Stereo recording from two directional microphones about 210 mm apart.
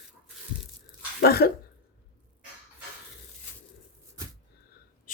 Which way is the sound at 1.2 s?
50° left (ahead or behind).